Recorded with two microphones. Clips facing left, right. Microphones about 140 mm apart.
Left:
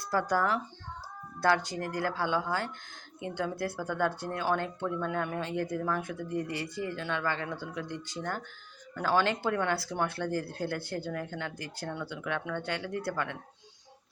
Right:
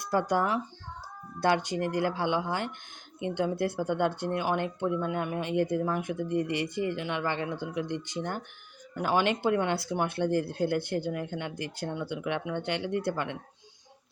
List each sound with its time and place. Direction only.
0.0 s speech: 20° right (ahead or behind)